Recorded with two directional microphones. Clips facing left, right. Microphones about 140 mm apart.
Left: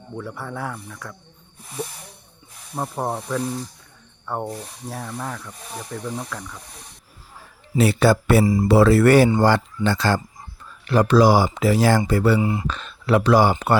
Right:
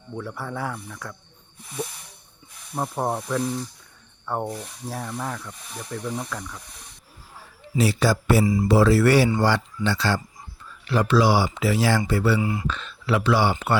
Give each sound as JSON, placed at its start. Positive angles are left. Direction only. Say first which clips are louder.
{"t": 0.2, "sound": "speech", "louder": "even", "side_deg": 0}
{"t": 2.7, "sound": "speech", "louder": "even", "side_deg": 0}
{"t": 7.8, "sound": "a man's voice", "louder": "left 4 dB", "side_deg": 60}
{"t": 12.4, "sound": "speech", "louder": "left 3 dB", "side_deg": 25}
{"t": 12.6, "sound": "speech", "louder": "left 3 dB", "side_deg": 45}